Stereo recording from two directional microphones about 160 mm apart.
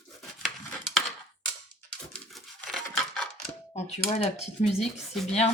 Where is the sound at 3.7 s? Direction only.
40° left (ahead or behind).